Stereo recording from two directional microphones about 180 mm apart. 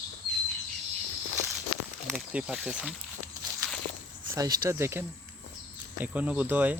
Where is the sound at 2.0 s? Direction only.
5° right (ahead or behind).